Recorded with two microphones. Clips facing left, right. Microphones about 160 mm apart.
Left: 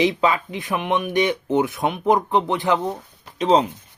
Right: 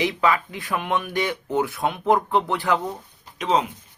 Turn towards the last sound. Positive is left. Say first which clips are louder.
# left 5 dB
turn(degrees=30)  # may be behind; listen again after turning